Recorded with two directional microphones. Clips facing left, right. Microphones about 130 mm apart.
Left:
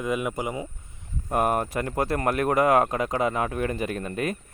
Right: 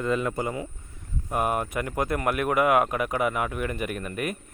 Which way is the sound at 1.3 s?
40° left (ahead or behind).